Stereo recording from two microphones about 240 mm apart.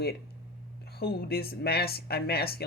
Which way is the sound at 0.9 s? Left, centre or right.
Left.